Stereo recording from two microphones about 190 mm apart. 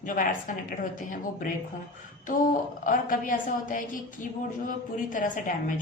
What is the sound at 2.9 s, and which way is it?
A woman's voice, 45° left (ahead or behind).